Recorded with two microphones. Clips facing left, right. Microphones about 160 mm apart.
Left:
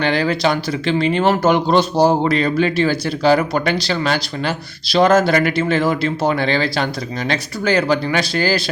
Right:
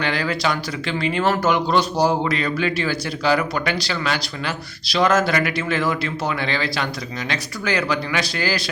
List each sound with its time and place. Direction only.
0.0 s speech: 30° left (ahead or behind)